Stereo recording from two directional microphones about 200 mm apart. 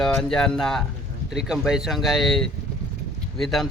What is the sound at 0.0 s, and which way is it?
A man's voice, centre (ahead or behind).